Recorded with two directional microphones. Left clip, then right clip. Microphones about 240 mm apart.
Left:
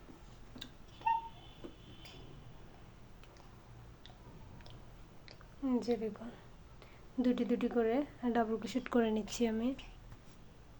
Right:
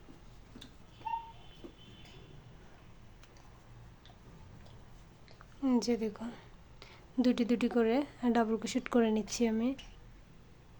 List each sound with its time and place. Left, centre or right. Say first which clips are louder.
5.6 s a woman's voice: right 3 dB; right